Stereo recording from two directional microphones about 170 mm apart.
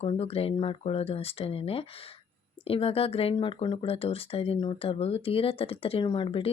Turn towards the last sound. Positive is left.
turn(degrees=35)  # may be behind; listen again after turning